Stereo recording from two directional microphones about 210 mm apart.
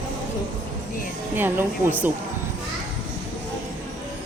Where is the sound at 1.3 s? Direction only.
10° right (ahead or behind).